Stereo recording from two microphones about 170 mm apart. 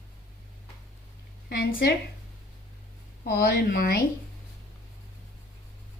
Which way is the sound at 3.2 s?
65° left (ahead or behind).